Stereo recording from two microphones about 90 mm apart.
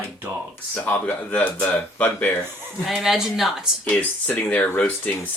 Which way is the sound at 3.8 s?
20° left (ahead or behind).